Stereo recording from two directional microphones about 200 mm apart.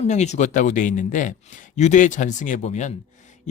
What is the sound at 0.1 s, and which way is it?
Speech, 35° left (ahead or behind).